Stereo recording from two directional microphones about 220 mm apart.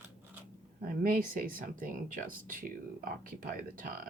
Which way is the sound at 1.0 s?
40° right (ahead or behind).